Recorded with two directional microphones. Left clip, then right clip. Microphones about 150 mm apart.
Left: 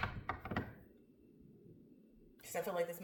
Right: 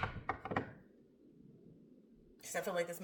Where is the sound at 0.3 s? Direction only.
5° left (ahead or behind).